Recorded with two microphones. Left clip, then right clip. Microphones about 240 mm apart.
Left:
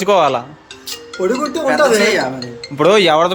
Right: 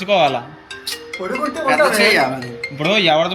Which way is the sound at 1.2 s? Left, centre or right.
Left.